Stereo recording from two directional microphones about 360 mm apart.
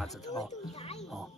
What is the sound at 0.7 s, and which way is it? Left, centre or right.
Music, centre.